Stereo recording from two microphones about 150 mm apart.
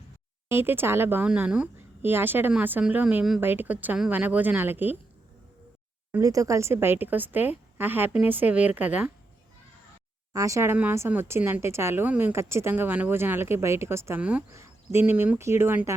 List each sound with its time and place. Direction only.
0.4 s speech: 15° right (ahead or behind)
6.1 s speech: 20° right (ahead or behind)
10.3 s speech: 20° right (ahead or behind)